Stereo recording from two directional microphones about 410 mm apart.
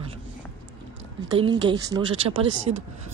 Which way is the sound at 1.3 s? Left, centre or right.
Centre.